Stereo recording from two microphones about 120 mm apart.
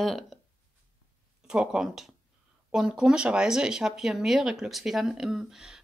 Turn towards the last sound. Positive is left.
turn(degrees=-5)  # may be behind; listen again after turning